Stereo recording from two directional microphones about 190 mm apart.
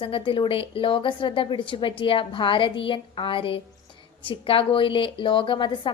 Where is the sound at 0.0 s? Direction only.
25° left (ahead or behind).